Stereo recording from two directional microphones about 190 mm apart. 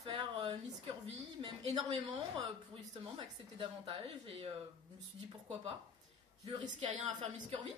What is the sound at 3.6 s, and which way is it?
Speech, 30° right (ahead or behind).